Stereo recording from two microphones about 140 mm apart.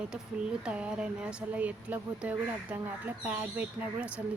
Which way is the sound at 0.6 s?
5° right (ahead or behind).